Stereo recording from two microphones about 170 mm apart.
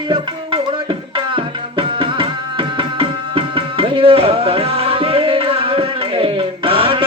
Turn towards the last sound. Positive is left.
turn(degrees=-30)  # may be behind; listen again after turning